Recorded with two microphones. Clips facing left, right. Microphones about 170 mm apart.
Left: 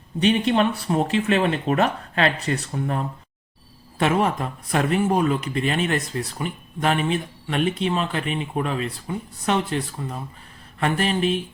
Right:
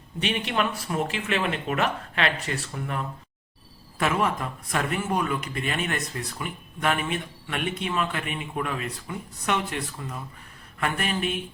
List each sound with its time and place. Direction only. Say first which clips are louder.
0.2 s a man's voice: left 8 dB; 35° left (ahead or behind)